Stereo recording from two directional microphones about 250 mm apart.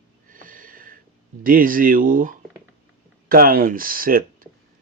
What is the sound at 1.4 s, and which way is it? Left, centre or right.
Speech, right.